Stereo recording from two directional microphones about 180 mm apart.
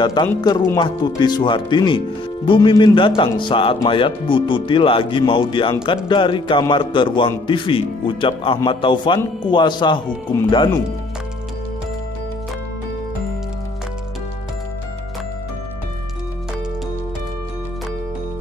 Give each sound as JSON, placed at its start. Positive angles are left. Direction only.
{"t": 0.0, "sound": "speech", "side_deg": 25}